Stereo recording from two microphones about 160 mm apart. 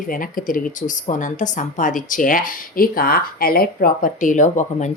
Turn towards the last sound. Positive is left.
turn(degrees=50)  # may be behind; listen again after turning